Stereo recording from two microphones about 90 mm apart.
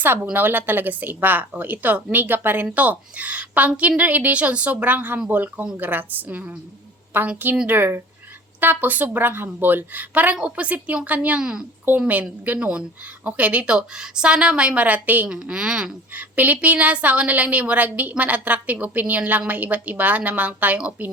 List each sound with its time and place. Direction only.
0.3 s a woman's voice: 20° right (ahead or behind)
15.4 s a woman's voice: 10° right (ahead or behind)